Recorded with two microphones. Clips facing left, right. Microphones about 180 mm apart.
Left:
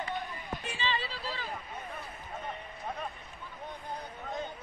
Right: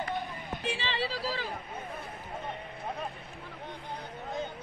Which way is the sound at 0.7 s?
75° right (ahead or behind).